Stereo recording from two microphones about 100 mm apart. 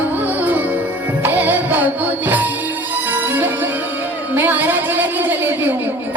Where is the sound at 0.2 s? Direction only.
15° right (ahead or behind).